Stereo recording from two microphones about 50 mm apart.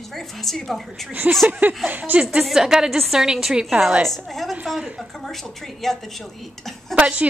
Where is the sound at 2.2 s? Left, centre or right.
Centre.